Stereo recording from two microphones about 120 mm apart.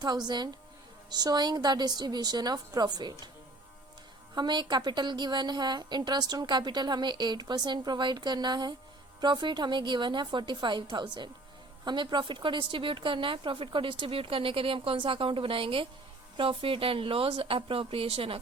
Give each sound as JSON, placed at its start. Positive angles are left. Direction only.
{"t": 0.3, "sound": "a woman's voice", "side_deg": -35}
{"t": 4.4, "sound": "a woman's voice", "side_deg": -40}